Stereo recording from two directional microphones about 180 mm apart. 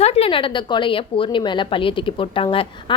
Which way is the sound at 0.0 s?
35° left (ahead or behind).